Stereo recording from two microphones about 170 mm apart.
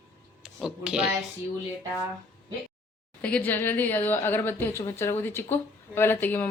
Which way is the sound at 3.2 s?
10° left (ahead or behind).